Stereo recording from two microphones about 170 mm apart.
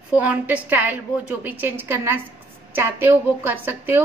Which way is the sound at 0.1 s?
10° right (ahead or behind).